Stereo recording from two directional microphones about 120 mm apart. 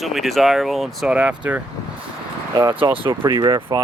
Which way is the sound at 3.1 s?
35° right (ahead or behind).